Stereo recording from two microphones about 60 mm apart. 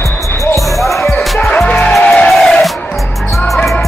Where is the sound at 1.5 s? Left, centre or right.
Left.